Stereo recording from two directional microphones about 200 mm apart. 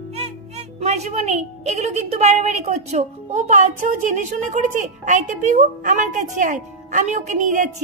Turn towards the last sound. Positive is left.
turn(degrees=-40)  # may be behind; listen again after turning